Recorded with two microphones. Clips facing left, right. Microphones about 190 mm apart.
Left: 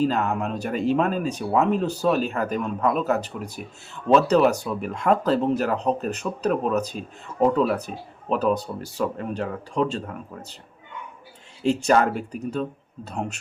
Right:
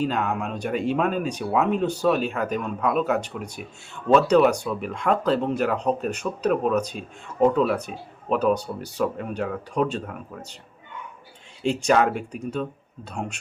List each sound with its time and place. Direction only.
0.0 s speech: centre (ahead or behind)
11.6 s speech: 40° left (ahead or behind)